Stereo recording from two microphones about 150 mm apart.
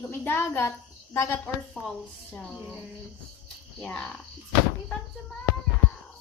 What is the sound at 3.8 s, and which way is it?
Speech, 10° left (ahead or behind).